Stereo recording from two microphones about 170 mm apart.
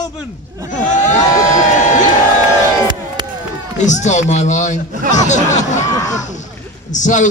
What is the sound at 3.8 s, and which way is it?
A man's voice, 45° left (ahead or behind).